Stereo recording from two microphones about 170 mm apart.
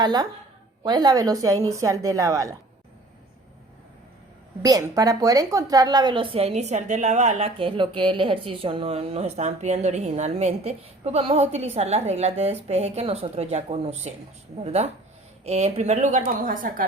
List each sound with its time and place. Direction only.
0.0 s a woman's voice: 25° right (ahead or behind)
4.6 s a woman's voice: 20° right (ahead or behind); by 16.8 s 55° right (ahead or behind)